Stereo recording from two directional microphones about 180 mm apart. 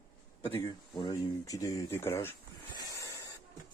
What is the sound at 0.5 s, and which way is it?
Speech, 25° left (ahead or behind).